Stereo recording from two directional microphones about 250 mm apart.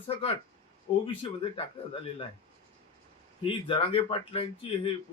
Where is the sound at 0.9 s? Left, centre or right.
Left.